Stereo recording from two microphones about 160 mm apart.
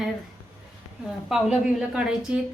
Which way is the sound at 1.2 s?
Centre (ahead or behind).